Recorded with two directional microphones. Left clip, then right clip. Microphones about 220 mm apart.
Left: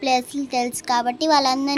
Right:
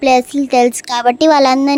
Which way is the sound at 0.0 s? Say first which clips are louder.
Right 9 dB; 40° right (ahead or behind).